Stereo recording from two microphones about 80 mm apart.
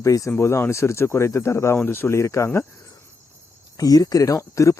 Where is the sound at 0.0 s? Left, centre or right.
Left.